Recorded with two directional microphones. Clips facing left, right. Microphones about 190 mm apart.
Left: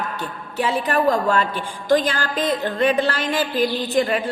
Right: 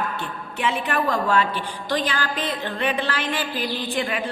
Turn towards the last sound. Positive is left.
turn(degrees=40)  # may be behind; listen again after turning